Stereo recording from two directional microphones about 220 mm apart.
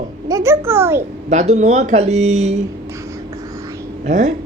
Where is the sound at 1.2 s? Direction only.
30° right (ahead or behind).